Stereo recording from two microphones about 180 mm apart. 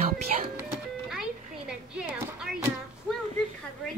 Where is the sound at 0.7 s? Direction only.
5° right (ahead or behind).